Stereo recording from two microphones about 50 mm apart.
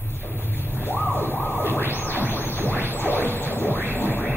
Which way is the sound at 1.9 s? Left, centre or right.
Left.